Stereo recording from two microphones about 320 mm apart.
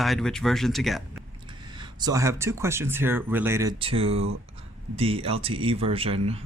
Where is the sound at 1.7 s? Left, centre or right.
Centre.